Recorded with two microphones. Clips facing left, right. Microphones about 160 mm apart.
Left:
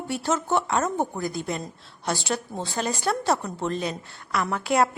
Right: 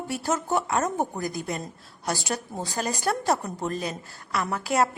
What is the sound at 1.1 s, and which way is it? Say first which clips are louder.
A woman's voice: left 1 dB; 45° right (ahead or behind).